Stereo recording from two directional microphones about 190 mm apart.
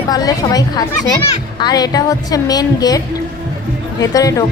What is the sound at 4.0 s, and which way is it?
Speech, 20° left (ahead or behind).